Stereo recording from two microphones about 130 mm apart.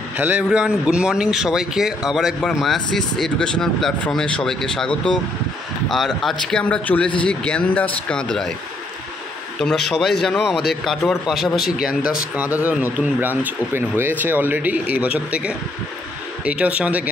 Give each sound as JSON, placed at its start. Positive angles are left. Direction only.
{"t": 0.2, "sound": "a man's voice", "side_deg": -10}
{"t": 9.6, "sound": "a man's voice", "side_deg": 5}